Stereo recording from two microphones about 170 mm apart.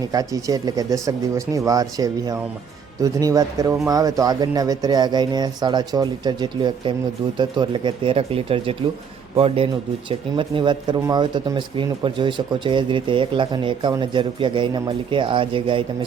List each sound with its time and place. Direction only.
0.1 s speech: 20° right (ahead or behind)